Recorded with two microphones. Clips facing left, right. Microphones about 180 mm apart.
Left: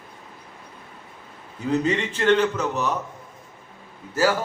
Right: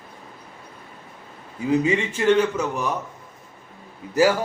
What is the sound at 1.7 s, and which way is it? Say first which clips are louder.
A man's voice: right 2 dB; 10° right (ahead or behind).